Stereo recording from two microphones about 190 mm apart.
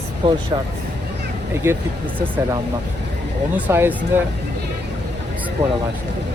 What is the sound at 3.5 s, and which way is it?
Speech, 10° right (ahead or behind).